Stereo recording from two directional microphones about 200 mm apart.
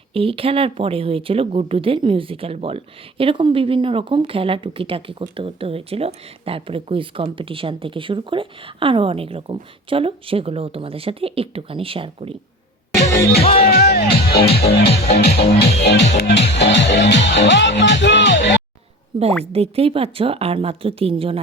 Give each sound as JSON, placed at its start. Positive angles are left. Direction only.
{"t": 0.1, "sound": "speech", "side_deg": -25}
{"t": 13.6, "sound": "speech", "side_deg": 50}
{"t": 19.1, "sound": "speech", "side_deg": -25}